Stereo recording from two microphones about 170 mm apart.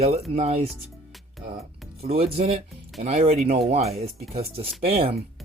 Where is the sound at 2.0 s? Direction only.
35° right (ahead or behind).